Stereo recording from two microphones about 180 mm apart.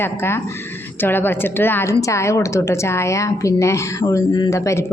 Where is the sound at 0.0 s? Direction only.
10° left (ahead or behind).